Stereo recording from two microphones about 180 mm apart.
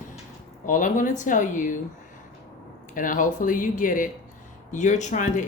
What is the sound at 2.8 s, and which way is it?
Speech, 50° left (ahead or behind).